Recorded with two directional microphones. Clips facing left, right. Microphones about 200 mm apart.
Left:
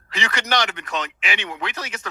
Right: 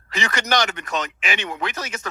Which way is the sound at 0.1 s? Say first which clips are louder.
Right 2 dB; 45° right (ahead or behind).